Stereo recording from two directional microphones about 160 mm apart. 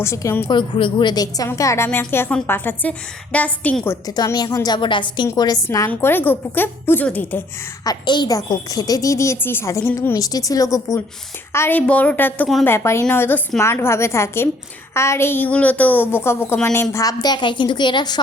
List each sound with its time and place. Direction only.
0.0 s a woman's voice: 15° left (ahead or behind)
0.4 s a woman's voice: 30° left (ahead or behind); by 3.9 s 10° left (ahead or behind)
4.0 s a woman's voice: 25° left (ahead or behind)
7.9 s a woman's voice: 25° left (ahead or behind)